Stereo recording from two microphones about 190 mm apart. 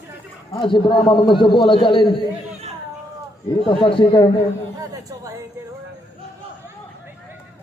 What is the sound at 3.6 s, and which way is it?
Speech, 30° left (ahead or behind).